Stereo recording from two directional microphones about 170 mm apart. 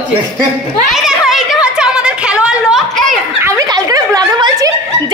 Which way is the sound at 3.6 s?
20° right (ahead or behind).